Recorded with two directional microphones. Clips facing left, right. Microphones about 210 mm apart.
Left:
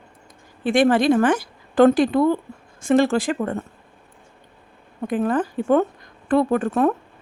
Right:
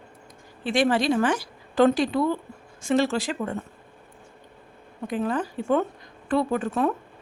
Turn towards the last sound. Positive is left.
turn(degrees=50)  # may be behind; listen again after turning